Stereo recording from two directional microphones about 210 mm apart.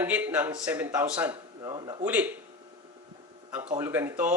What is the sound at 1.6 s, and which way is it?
Speech, 20° right (ahead or behind).